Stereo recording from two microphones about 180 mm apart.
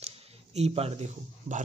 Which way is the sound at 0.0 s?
35° right (ahead or behind).